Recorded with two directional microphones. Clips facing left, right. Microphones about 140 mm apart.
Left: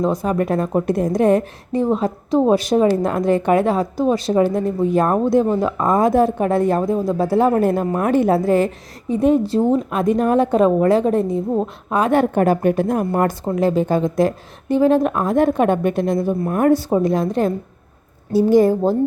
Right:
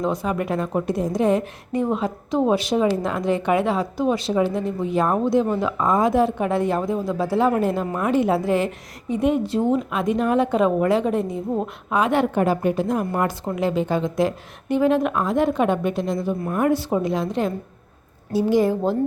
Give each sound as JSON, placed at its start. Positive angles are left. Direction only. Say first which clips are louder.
{"t": 0.0, "sound": "a woman's voice", "louder": "left 4 dB", "side_deg": 40}
{"t": 0.9, "sound": "a woman's voice", "louder": "left 4 dB", "side_deg": 55}
{"t": 1.7, "sound": "a woman's voice", "louder": "left 4 dB", "side_deg": 30}